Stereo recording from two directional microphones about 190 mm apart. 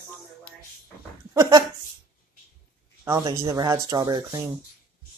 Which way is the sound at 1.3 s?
20° right (ahead or behind).